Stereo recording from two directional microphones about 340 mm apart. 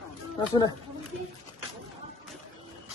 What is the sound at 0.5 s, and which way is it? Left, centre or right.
Speech, centre.